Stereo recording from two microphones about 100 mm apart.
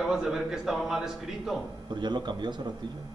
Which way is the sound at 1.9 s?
50° right (ahead or behind).